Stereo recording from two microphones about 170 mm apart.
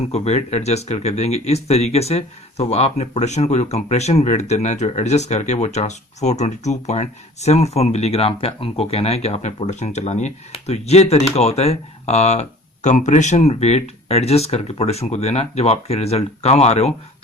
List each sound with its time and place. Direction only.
0.0 s speech: 40° left (ahead or behind)